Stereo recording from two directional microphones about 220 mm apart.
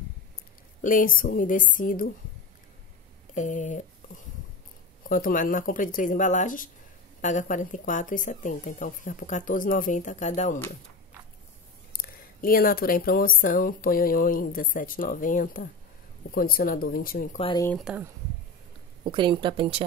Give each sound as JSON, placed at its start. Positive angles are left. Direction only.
{"t": 0.8, "sound": "speech", "side_deg": 40}
{"t": 3.3, "sound": "speech", "side_deg": 35}
{"t": 5.0, "sound": "speech", "side_deg": 40}
{"t": 11.9, "sound": "speech", "side_deg": 40}
{"t": 17.4, "sound": "speech", "side_deg": 25}
{"t": 17.6, "sound": "speech", "side_deg": 0}
{"t": 19.0, "sound": "speech", "side_deg": -20}